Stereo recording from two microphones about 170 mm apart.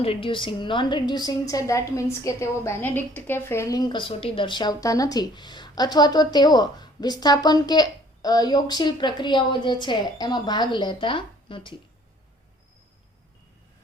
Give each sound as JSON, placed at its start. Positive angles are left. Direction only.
{"t": 0.0, "sound": "a woman's voice", "side_deg": 30}